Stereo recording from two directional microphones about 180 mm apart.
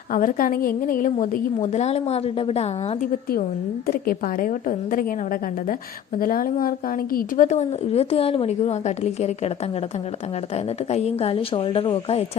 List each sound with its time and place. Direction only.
0.1 s a woman's voice: 50° left (ahead or behind); by 2.6 s 35° left (ahead or behind)
3.8 s a woman's voice: 55° left (ahead or behind)
6.1 s a woman's voice: 50° left (ahead or behind); by 8.7 s 35° left (ahead or behind)
10.9 s a woman's voice: 35° left (ahead or behind)